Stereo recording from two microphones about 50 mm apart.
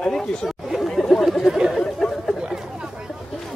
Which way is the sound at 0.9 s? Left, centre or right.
Centre.